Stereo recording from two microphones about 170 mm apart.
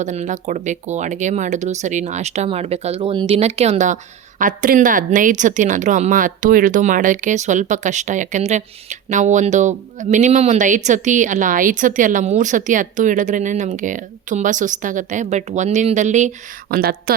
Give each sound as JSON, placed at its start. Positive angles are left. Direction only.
{"t": 0.0, "sound": "speech", "side_deg": -45}
{"t": 16.6, "sound": "a woman's voice", "side_deg": -60}